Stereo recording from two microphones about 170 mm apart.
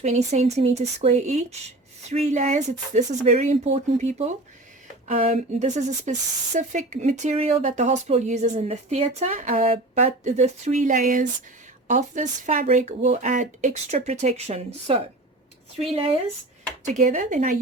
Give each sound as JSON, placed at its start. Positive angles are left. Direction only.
{"t": 0.0, "sound": "speech", "side_deg": -40}
{"t": 16.8, "sound": "speech", "side_deg": -45}